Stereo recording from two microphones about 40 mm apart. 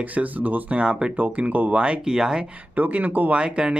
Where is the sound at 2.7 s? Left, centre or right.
Right.